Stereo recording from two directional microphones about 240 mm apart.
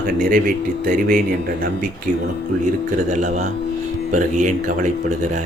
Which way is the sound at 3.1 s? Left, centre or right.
Right.